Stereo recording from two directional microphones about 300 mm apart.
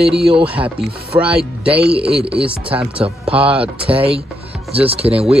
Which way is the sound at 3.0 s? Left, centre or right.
Centre.